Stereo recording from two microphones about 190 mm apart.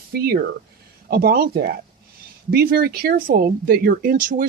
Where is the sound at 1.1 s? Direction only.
50° right (ahead or behind).